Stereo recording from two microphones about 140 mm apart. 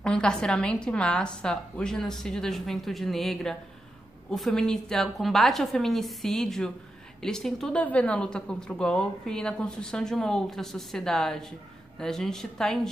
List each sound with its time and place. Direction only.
0.0 s a woman's voice: 5° left (ahead or behind)